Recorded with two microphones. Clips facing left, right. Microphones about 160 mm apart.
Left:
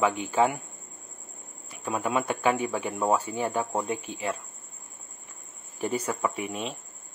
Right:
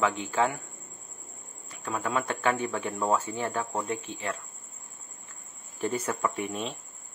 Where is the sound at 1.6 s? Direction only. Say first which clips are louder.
Left 3 dB; 15° left (ahead or behind).